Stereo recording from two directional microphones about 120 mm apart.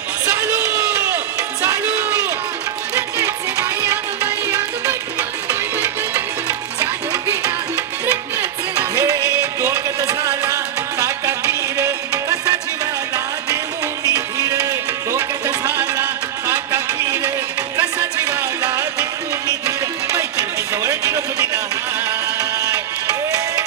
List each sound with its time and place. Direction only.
0.3 s a sound: 15° right (ahead or behind)
1.6 s music: 25° right (ahead or behind)
6.5 s music: 30° right (ahead or behind)
8.0 s music: 15° right (ahead or behind)
9.0 s music: 30° right (ahead or behind)
16.5 s a sound: 30° right (ahead or behind)
17.7 s music: 25° right (ahead or behind)
20.8 s a sound: 25° right (ahead or behind)
22.5 s music: 30° right (ahead or behind)